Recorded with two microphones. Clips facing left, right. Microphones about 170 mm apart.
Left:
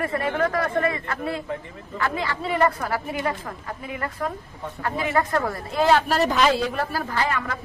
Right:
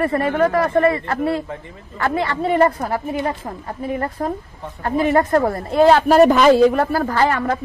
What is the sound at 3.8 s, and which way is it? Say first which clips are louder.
A woman's voice: right 7 dB; 40° right (ahead or behind).